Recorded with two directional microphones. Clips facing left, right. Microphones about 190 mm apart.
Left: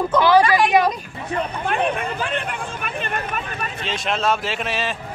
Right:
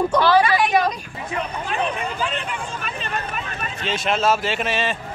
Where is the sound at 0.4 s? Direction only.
Centre (ahead or behind).